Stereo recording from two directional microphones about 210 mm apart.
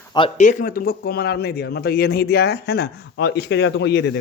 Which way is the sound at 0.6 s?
45° left (ahead or behind).